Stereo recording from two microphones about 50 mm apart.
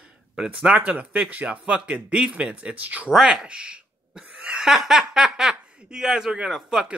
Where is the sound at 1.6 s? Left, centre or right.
Centre.